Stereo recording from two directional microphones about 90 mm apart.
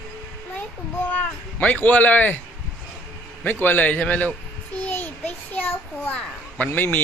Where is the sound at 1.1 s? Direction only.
15° left (ahead or behind).